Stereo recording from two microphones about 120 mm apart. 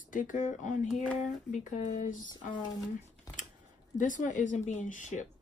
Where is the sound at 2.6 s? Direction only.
30° left (ahead or behind).